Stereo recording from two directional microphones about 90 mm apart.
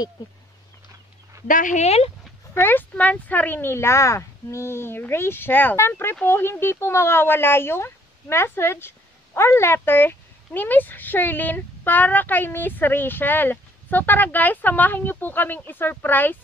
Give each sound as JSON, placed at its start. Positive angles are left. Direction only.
{"t": 2.5, "sound": "speech", "side_deg": 25}